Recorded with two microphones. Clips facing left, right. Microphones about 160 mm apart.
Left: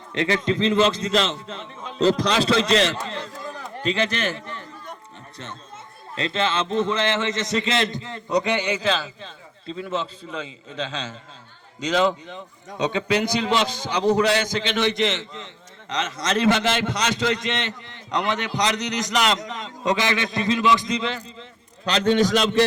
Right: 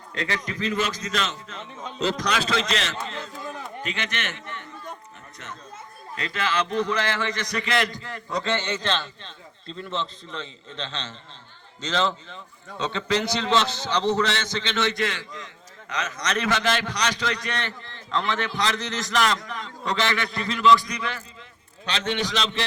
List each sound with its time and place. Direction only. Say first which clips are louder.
0.1 s a man's voice: left 8 dB; 20° left (ahead or behind)
6.1 s a man's voice: left 3 dB; 25° left (ahead or behind)
21.8 s a man's voice: left 8 dB; 40° left (ahead or behind)